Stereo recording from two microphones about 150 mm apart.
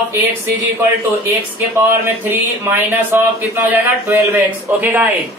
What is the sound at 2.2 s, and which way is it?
Speech, 15° right (ahead or behind).